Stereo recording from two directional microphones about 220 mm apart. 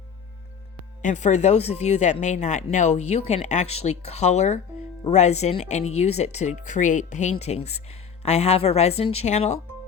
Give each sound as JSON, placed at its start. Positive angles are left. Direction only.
{"t": 1.0, "sound": "speech", "side_deg": 30}